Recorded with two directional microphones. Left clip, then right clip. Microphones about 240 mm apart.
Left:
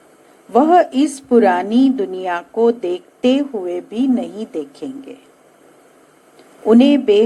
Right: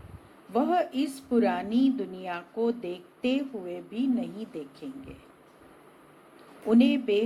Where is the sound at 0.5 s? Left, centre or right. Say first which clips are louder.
Left 14 dB; left.